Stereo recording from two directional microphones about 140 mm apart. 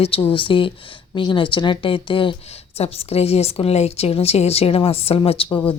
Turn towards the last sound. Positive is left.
turn(degrees=40)  # may be behind; listen again after turning